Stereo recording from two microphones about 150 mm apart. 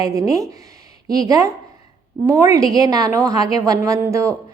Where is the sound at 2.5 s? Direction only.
25° right (ahead or behind).